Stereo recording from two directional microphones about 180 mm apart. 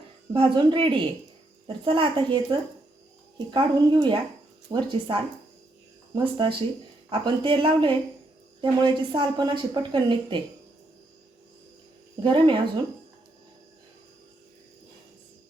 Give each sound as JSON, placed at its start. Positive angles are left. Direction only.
{"t": 0.3, "sound": "speech", "side_deg": -25}
{"t": 12.2, "sound": "speech", "side_deg": -25}